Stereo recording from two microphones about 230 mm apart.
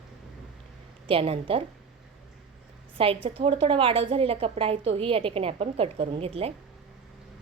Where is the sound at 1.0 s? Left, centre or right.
Right.